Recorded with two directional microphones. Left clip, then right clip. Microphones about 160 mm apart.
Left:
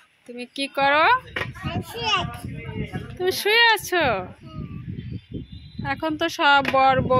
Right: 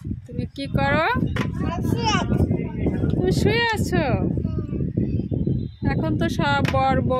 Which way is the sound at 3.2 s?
5° right (ahead or behind).